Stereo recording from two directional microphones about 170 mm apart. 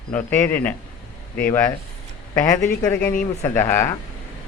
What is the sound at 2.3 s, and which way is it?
Speech, 20° left (ahead or behind).